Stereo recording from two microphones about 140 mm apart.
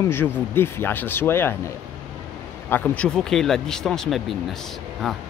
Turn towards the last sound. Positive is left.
turn(degrees=0)  # may be behind; listen again after turning